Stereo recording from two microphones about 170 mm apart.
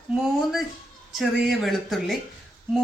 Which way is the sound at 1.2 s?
Centre (ahead or behind).